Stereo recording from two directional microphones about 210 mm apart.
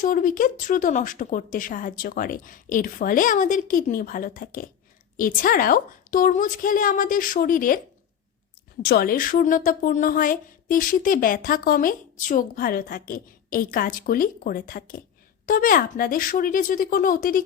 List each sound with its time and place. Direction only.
0.0 s a woman's voice: 40° left (ahead or behind)
8.8 s a woman's voice: 50° left (ahead or behind)